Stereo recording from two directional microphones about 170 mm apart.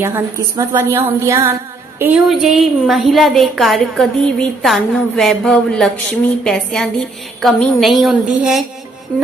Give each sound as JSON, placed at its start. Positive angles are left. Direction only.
{"t": 0.0, "sound": "a woman's voice", "side_deg": -15}